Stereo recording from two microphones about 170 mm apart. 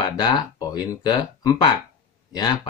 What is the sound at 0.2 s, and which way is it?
Speech, 25° left (ahead or behind).